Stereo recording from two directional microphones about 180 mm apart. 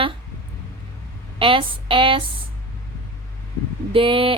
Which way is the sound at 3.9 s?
30° right (ahead or behind).